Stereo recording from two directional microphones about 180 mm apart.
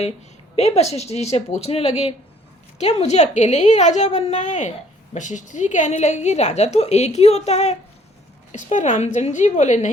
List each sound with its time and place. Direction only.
0.5 s a woman's voice: 35° left (ahead or behind)